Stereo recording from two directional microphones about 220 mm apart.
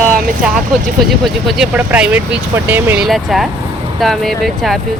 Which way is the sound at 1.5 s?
5° right (ahead or behind).